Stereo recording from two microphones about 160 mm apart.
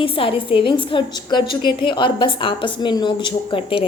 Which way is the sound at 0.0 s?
35° left (ahead or behind).